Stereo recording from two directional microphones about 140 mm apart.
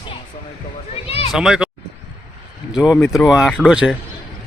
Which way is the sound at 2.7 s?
5° right (ahead or behind).